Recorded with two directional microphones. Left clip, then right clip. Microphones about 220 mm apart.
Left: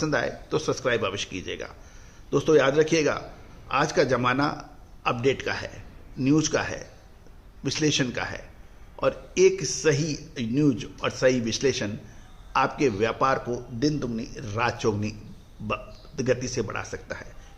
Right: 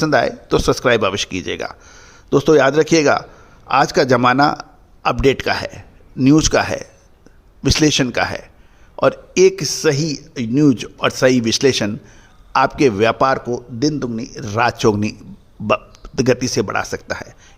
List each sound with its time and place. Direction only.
0.0 s speech: 45° right (ahead or behind)